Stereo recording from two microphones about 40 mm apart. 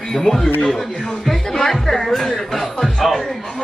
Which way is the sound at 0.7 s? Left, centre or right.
Centre.